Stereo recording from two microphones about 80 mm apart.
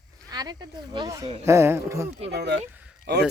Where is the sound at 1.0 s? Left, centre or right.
Right.